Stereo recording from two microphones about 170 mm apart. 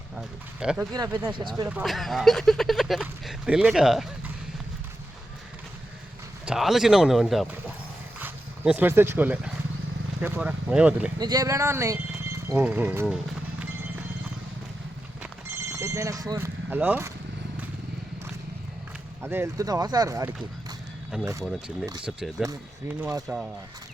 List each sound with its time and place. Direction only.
0.2 s speech: 5° right (ahead or behind)
0.9 s speech: 20° right (ahead or behind)
1.8 s speech: centre (ahead or behind)
6.4 s speech: 5° right (ahead or behind)
11.2 s speech: 25° right (ahead or behind)
15.7 s speech: 15° right (ahead or behind)
16.6 s speech: 10° right (ahead or behind)
19.2 s speech: 15° right (ahead or behind)
21.4 s speech: centre (ahead or behind)